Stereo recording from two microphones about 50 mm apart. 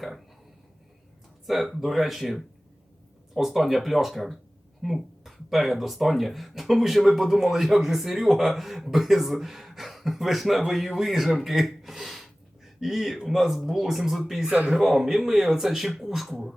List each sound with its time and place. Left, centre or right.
1.5 s speech: centre
14.4 s speech: right
14.8 s speech: centre